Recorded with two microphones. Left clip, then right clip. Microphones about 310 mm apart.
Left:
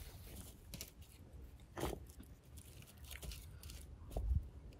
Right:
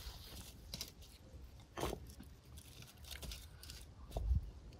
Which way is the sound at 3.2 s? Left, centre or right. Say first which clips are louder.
Right 3 dB; centre.